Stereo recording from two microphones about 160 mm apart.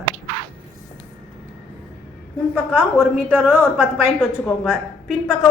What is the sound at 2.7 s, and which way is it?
A woman's voice, 10° right (ahead or behind).